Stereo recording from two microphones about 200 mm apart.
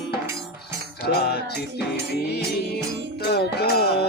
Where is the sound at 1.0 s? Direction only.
50° left (ahead or behind).